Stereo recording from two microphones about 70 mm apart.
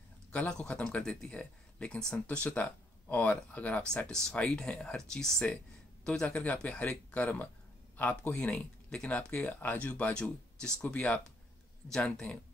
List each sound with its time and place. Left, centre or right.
0.3 s speech: centre
4.1 s speech: centre